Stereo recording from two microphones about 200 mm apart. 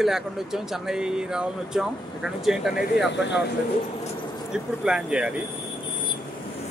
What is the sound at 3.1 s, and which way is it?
Speech, 60° left (ahead or behind).